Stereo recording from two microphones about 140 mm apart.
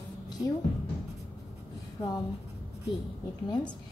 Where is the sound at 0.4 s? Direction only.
10° right (ahead or behind).